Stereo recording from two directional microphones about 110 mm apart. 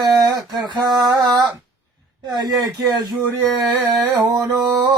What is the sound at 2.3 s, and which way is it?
Male singing, 40° right (ahead or behind).